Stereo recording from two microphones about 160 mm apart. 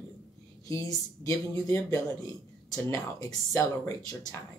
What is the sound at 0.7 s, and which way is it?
Speech, 20° left (ahead or behind).